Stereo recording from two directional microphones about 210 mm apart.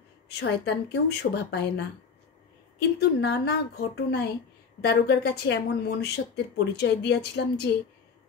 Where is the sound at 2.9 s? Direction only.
50° left (ahead or behind).